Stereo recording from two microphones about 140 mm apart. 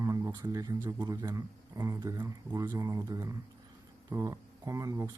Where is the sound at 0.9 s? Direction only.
25° right (ahead or behind).